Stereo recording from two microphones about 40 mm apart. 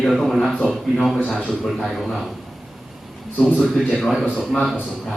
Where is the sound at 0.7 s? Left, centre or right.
Centre.